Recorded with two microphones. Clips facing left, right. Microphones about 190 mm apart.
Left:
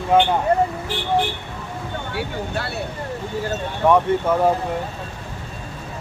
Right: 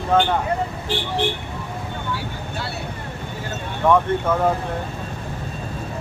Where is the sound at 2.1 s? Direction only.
60° left (ahead or behind).